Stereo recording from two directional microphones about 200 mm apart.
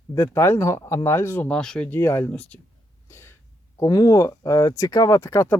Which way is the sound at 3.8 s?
15° left (ahead or behind).